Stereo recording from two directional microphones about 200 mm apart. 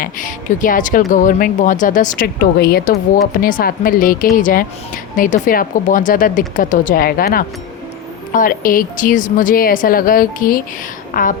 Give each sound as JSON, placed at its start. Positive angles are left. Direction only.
{"t": 0.0, "sound": "a woman's voice", "side_deg": 40}